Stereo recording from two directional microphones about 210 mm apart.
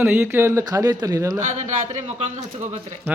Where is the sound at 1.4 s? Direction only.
30° right (ahead or behind).